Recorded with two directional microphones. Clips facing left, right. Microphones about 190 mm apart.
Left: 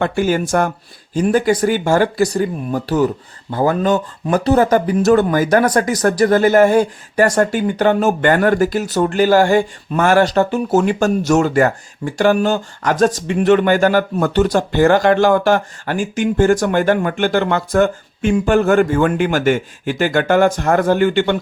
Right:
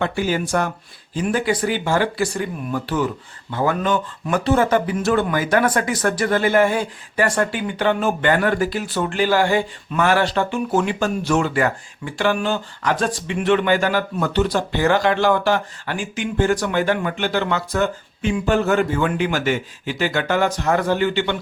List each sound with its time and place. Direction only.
0.0 s speech: 50° left (ahead or behind)